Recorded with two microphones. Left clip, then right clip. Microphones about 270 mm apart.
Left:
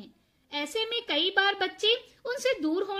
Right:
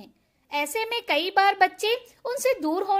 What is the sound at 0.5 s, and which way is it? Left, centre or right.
A woman's voice, right.